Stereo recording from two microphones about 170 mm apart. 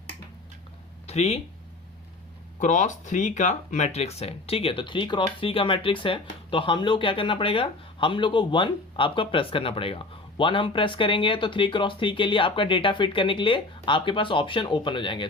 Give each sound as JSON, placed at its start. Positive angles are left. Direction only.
{"t": 1.0, "sound": "speech", "side_deg": 40}
{"t": 2.6, "sound": "speech", "side_deg": 45}